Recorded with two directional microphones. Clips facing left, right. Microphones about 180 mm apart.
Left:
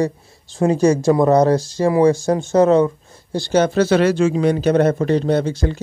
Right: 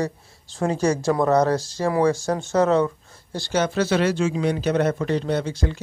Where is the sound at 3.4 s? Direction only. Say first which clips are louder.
Left 6 dB; 35° left (ahead or behind).